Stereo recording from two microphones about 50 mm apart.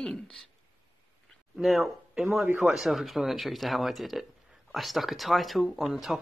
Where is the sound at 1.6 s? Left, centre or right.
Centre.